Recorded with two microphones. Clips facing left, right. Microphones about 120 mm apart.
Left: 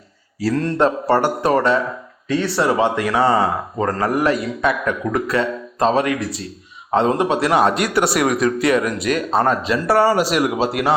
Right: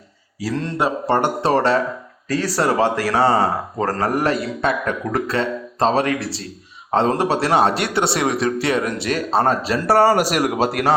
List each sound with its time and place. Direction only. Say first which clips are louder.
0.4 s speech: left 4 dB; 20° right (ahead or behind); by 10.9 s 45° right (ahead or behind)